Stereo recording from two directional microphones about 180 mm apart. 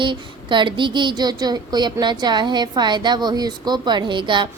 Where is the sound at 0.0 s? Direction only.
25° right (ahead or behind).